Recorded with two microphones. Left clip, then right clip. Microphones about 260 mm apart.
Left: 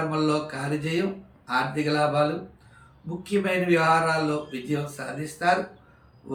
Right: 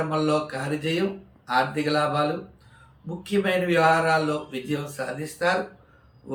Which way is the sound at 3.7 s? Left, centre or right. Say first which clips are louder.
Right 1 dB; centre.